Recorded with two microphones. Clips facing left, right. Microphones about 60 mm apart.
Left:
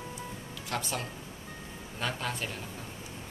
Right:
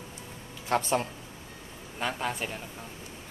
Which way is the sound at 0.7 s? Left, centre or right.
Right.